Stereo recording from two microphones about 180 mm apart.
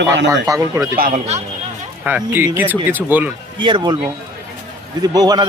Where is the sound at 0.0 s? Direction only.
85° right.